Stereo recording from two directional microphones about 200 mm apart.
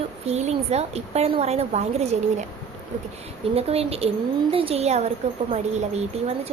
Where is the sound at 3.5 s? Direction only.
30° right (ahead or behind).